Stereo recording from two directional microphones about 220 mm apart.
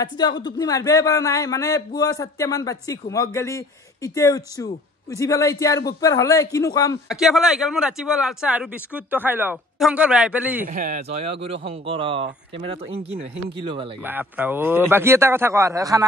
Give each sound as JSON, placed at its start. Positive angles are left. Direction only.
{"t": 0.0, "sound": "speech", "side_deg": 20}
{"t": 7.1, "sound": "speech", "side_deg": 0}
{"t": 10.7, "sound": "speech", "side_deg": -35}
{"t": 14.0, "sound": "speech", "side_deg": -10}